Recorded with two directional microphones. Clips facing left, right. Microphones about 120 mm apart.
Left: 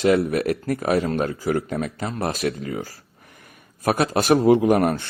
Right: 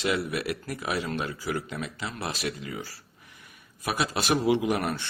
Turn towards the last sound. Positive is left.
turn(degrees=45)  # may be behind; listen again after turning